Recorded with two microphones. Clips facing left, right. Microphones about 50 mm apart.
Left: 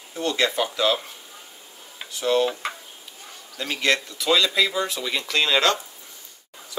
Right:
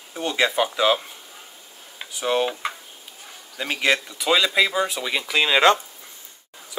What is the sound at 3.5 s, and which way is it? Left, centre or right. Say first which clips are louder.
Speech: right 1 dB; centre.